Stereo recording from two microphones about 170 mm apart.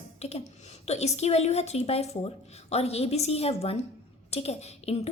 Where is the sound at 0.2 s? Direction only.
40° left (ahead or behind).